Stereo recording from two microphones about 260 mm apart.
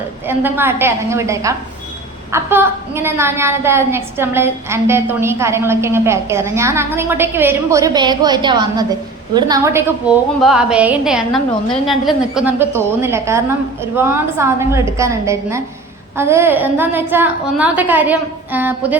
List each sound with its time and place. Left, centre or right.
0.3 s a woman's voice: centre